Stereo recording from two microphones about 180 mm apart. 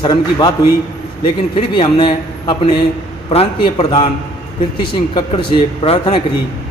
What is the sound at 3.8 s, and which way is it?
Speech, 35° left (ahead or behind).